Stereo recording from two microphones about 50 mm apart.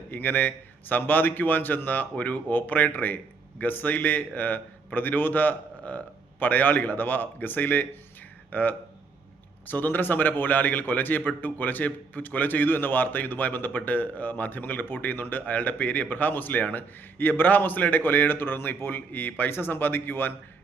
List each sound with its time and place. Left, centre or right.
0.1 s a man's voice: left